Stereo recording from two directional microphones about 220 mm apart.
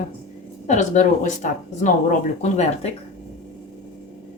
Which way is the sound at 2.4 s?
30° left (ahead or behind).